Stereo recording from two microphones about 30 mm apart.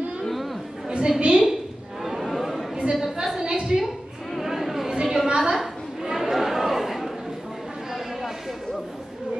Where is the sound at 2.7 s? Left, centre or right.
Centre.